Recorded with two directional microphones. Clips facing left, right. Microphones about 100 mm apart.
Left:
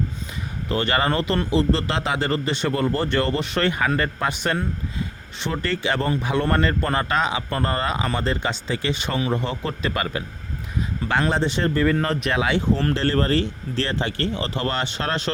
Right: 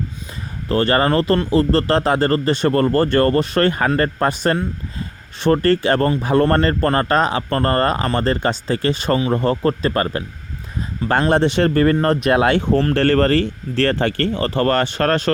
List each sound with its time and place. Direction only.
0.7 s speech: 35° right (ahead or behind)
11.3 s speech: 60° right (ahead or behind)
12.0 s speech: 50° right (ahead or behind)